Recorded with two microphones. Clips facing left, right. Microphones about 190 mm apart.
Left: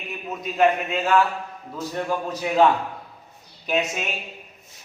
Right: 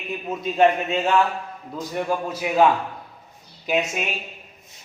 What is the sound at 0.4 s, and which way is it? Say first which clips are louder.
Speech: right 2 dB; 25° right (ahead or behind).